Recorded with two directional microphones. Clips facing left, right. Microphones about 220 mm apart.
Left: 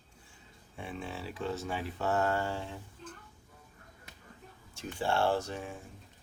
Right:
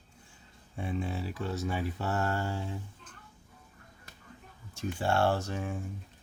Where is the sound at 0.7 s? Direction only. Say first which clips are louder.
Right 6 dB; 40° right (ahead or behind).